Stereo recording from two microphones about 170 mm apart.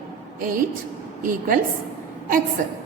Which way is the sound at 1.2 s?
55° right (ahead or behind).